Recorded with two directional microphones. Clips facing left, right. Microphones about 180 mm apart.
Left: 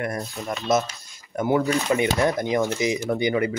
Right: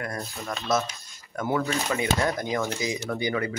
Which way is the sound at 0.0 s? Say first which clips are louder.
Left 5 dB; 20° left (ahead or behind).